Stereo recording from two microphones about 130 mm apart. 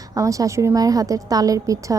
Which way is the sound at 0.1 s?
25° right (ahead or behind).